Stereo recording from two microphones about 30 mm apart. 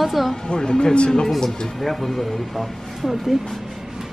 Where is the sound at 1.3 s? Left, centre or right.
Centre.